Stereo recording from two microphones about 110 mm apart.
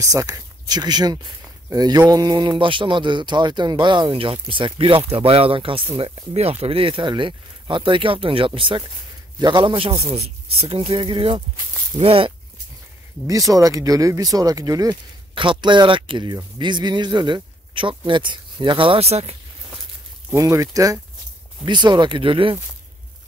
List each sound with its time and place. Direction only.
0.0 s speech: 30° right (ahead or behind); by 11.4 s 50° right (ahead or behind)
12.0 s speech: 60° right (ahead or behind)
13.3 s speech: 30° right (ahead or behind)
15.3 s speech: 50° right (ahead or behind); by 19.3 s 70° right (ahead or behind)
20.3 s speech: 30° right (ahead or behind)
21.6 s speech: 45° right (ahead or behind)